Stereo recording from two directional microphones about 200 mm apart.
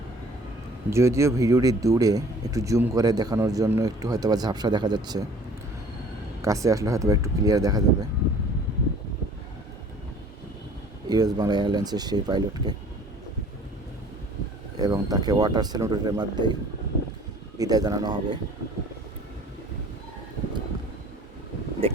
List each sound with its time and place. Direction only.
0.9 s speech: 15° right (ahead or behind)
6.4 s speech: 15° right (ahead or behind)
11.1 s speech: 20° right (ahead or behind)
14.8 s speech: 20° right (ahead or behind)
17.6 s speech: 20° right (ahead or behind)
21.8 s speech: 30° right (ahead or behind)